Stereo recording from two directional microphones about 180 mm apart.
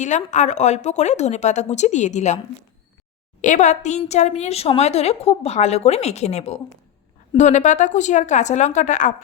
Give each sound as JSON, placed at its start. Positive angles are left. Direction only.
{"t": 0.0, "sound": "a woman's voice", "side_deg": 40}
{"t": 3.4, "sound": "a woman's voice", "side_deg": 45}